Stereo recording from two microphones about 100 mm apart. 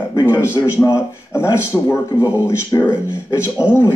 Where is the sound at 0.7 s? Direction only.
30° left (ahead or behind).